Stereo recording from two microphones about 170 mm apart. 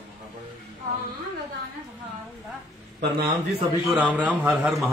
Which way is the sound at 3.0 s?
65° right (ahead or behind).